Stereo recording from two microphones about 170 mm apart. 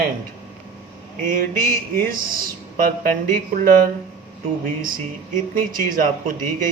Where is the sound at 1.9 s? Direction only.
60° right (ahead or behind).